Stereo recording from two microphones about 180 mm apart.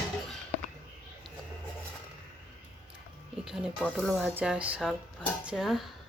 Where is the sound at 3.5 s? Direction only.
5° right (ahead or behind).